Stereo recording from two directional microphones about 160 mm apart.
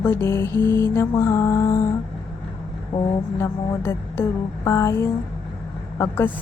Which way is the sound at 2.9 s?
40° left (ahead or behind).